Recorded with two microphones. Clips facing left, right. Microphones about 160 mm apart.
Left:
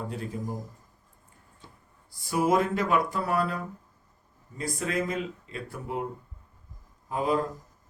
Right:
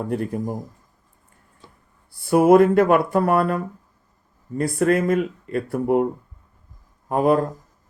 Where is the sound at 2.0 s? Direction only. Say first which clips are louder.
Right 11 dB; 60° right (ahead or behind).